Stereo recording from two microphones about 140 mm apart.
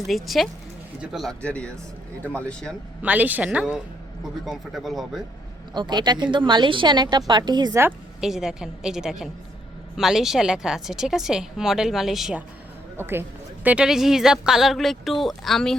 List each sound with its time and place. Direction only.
0.0 s speech: centre (ahead or behind)
3.0 s a woman's voice: 10° right (ahead or behind)
5.7 s a woman's voice: 30° right (ahead or behind)
8.2 s speech: 5° right (ahead or behind)
13.0 s a woman's voice: 15° right (ahead or behind)
13.7 s speech: 5° right (ahead or behind)